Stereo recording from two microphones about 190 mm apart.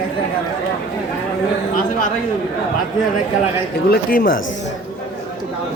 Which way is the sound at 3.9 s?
50° left (ahead or behind).